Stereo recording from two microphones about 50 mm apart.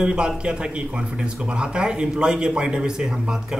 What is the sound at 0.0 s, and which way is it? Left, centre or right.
A man's voice, centre.